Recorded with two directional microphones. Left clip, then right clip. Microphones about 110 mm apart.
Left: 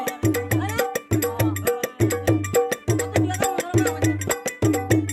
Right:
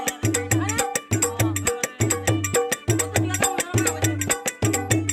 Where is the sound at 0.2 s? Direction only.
30° left (ahead or behind).